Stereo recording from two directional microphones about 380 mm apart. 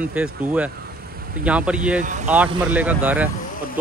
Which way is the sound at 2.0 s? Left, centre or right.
Centre.